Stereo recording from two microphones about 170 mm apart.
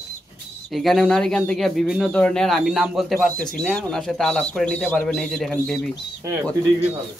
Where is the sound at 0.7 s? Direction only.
Centre (ahead or behind).